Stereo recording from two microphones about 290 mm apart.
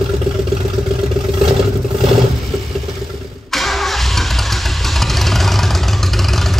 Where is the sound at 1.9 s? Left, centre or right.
Centre.